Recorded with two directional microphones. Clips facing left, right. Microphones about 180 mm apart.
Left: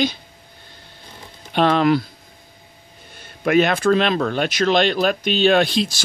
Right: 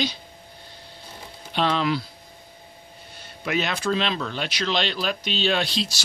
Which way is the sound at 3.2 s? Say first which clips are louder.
Left 10 dB; 50° left (ahead or behind).